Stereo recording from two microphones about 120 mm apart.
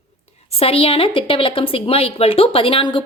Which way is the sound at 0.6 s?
50° left (ahead or behind).